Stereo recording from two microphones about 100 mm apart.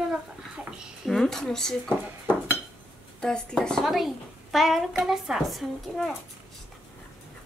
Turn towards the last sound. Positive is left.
turn(degrees=0)  # may be behind; listen again after turning